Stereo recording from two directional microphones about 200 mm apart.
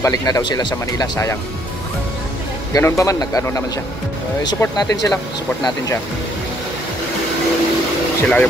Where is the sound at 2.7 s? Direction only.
15° left (ahead or behind).